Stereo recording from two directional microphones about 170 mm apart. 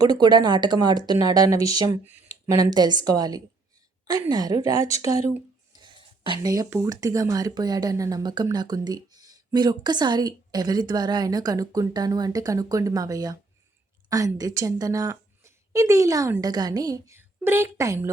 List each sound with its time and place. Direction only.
0.0 s a woman's voice: 25° right (ahead or behind)